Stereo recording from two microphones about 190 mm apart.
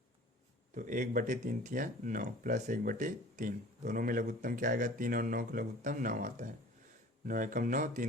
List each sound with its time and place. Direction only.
0.7 s speech: 45° right (ahead or behind)